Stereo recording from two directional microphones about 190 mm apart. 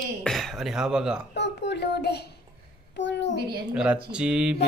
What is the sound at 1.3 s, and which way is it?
A child's voice, 65° left (ahead or behind).